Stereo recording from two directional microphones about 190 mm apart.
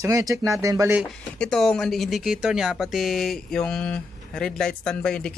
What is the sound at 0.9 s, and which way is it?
Speech, 5° left (ahead or behind).